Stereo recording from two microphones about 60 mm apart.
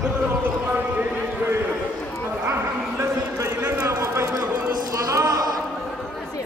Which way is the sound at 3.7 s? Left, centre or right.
Right.